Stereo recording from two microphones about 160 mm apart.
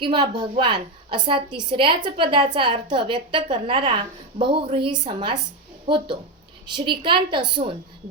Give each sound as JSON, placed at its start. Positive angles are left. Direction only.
{"t": 0.0, "sound": "a woman's voice", "side_deg": -30}